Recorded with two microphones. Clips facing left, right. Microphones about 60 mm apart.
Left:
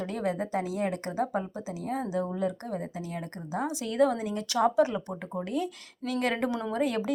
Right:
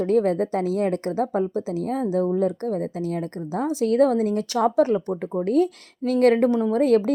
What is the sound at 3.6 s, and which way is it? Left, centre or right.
Speech, right.